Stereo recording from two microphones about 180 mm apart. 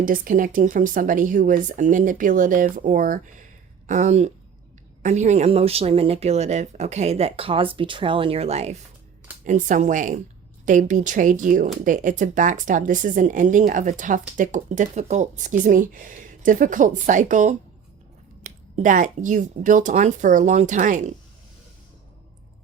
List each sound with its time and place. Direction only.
0.0 s speech: 50° right (ahead or behind)